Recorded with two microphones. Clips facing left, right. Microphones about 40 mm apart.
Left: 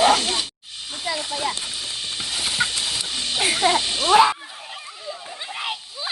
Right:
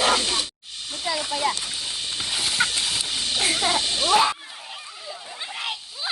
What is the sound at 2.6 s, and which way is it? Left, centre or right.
Horse, centre.